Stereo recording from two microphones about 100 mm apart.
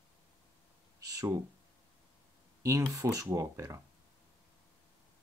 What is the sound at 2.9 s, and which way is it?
Speech, 35° right (ahead or behind).